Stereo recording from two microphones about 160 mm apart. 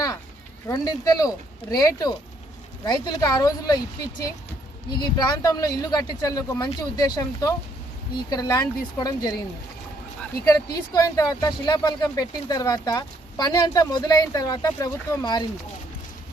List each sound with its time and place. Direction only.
0.7 s speech: 20° left (ahead or behind)
4.9 s speech: 25° left (ahead or behind)
10.4 s speech: 25° left (ahead or behind)